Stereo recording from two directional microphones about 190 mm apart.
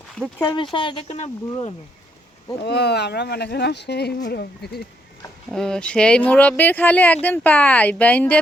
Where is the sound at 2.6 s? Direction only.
60° left (ahead or behind).